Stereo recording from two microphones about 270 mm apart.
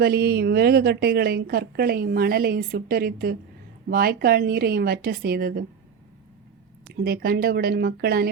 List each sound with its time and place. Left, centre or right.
0.0 s a woman's voice: right
6.8 s a woman's voice: right